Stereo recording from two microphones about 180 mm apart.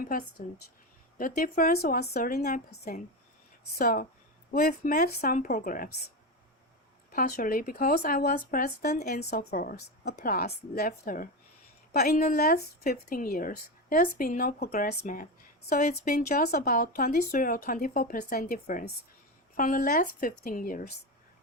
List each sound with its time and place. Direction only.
0.0 s speech: 50° left (ahead or behind)
7.1 s a woman's voice: 55° left (ahead or behind)